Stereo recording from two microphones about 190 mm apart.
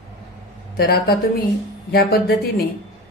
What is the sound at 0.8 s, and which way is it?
A woman's voice, 55° left (ahead or behind).